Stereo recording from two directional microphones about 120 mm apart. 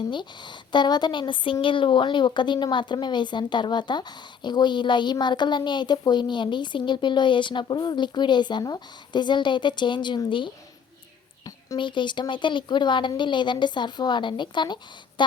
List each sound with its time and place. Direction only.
0.1 s speech: 40° left (ahead or behind)
11.8 s speech: 40° left (ahead or behind)